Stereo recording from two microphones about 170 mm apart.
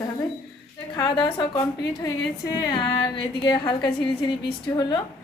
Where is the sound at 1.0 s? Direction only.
25° left (ahead or behind).